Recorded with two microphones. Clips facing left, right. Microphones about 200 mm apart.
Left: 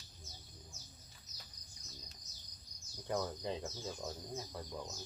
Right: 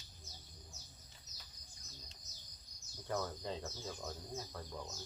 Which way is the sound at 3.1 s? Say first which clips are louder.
Left 2 dB; 15° left (ahead or behind).